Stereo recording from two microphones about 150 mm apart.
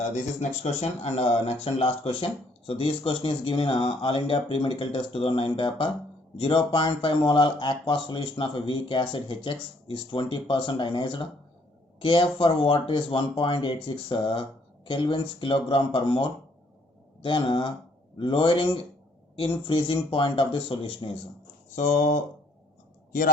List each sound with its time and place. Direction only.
0.6 s speech: 45° left (ahead or behind)
21.8 s speech: 55° left (ahead or behind)